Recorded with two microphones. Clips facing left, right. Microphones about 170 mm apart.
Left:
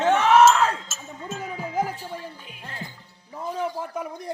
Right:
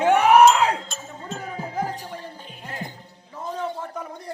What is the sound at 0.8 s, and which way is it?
Speech, 5° left (ahead or behind).